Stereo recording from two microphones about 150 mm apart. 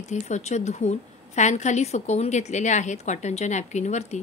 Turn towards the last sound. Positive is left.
turn(degrees=50)  # may be behind; listen again after turning